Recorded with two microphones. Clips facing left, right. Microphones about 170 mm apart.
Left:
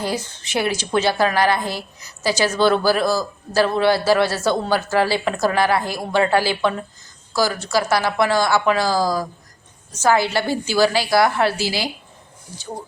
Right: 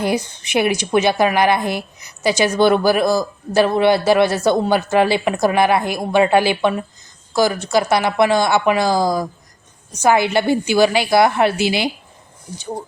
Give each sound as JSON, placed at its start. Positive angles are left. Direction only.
{"t": 0.0, "sound": "a woman's voice", "side_deg": -15}